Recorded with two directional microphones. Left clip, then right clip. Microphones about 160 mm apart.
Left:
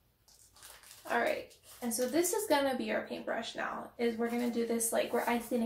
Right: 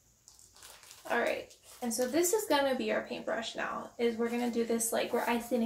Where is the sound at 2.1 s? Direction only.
5° right (ahead or behind).